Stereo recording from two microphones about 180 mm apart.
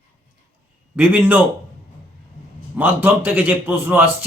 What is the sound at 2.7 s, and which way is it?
A man's voice, 10° right (ahead or behind).